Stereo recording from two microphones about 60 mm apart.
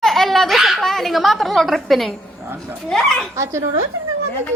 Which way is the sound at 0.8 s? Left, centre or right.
Centre.